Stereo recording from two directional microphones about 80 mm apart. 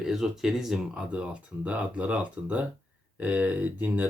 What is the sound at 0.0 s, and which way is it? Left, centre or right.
Speech, centre.